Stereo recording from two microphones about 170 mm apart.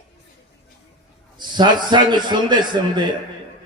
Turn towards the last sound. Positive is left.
turn(degrees=-25)  # may be behind; listen again after turning